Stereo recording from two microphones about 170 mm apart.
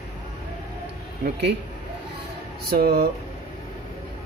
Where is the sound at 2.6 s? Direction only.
60° right (ahead or behind).